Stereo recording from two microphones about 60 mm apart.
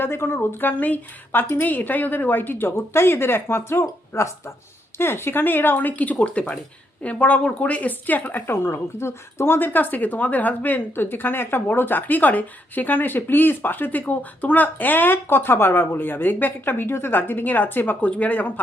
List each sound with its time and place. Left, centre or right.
0.0 s a woman's voice: left